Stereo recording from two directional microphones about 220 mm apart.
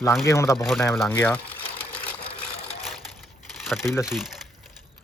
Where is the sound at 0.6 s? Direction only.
Centre (ahead or behind).